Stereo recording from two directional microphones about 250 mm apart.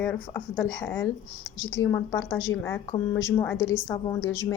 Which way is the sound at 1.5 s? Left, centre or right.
Left.